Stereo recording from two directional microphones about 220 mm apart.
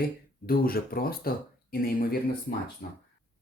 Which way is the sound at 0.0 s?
40° left (ahead or behind).